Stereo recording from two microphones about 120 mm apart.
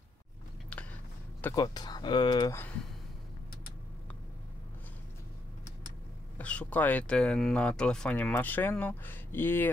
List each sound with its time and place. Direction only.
1.5 s speech: 35° left (ahead or behind)
2.5 s speech: 15° left (ahead or behind)
6.3 s speech: 10° left (ahead or behind)